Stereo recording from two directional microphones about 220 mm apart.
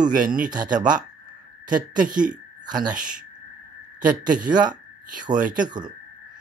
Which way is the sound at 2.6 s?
20° right (ahead or behind).